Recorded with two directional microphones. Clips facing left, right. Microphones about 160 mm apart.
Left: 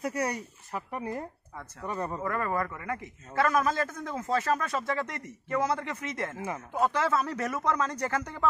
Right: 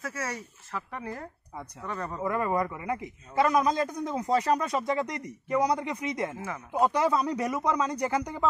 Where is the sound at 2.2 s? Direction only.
15° right (ahead or behind).